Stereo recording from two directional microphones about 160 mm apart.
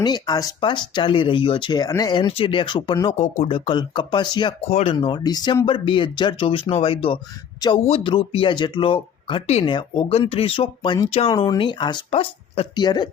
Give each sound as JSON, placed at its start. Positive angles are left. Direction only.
{"t": 0.0, "sound": "speech", "side_deg": 25}
{"t": 3.2, "sound": "speech", "side_deg": 40}
{"t": 4.7, "sound": "speech", "side_deg": 40}
{"t": 4.9, "sound": "speech", "side_deg": 30}